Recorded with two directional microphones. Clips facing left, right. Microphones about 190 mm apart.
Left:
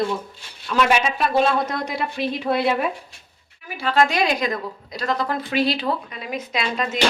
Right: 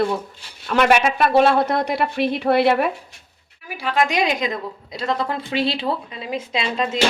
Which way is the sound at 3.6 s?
10° right (ahead or behind).